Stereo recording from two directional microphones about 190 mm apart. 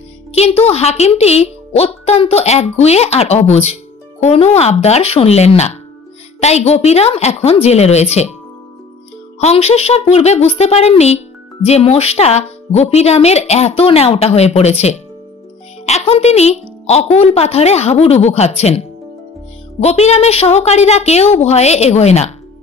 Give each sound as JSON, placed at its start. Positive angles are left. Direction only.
{"t": 0.3, "sound": "a woman's voice", "side_deg": 35}
{"t": 9.4, "sound": "a woman's voice", "side_deg": 35}